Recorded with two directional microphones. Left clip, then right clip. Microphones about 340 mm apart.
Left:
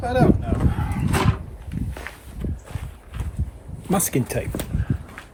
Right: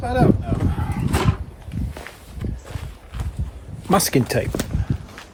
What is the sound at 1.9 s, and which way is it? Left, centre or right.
Walk, centre.